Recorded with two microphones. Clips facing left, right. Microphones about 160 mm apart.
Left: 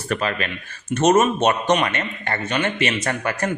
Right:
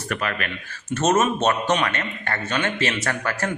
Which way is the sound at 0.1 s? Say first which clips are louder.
Left 4 dB; 25° left (ahead or behind).